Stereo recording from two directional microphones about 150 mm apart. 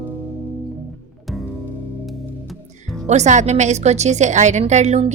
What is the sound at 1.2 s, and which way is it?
Music, centre (ahead or behind).